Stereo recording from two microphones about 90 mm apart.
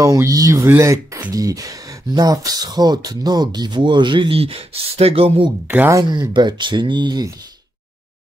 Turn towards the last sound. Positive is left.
turn(degrees=-55)  # may be behind; listen again after turning